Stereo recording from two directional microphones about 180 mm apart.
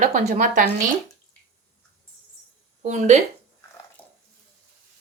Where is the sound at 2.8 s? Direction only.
40° right (ahead or behind).